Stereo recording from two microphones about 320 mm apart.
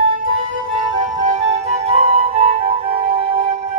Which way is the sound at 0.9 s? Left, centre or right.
Right.